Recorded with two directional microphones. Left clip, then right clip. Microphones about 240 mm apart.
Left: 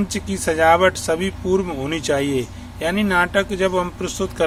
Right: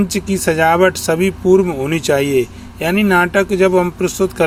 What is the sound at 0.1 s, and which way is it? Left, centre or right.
Speech, right.